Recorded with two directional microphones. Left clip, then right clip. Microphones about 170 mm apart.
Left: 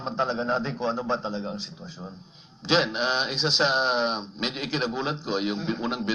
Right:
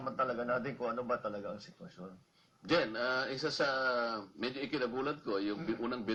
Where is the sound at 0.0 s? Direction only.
30° left (ahead or behind).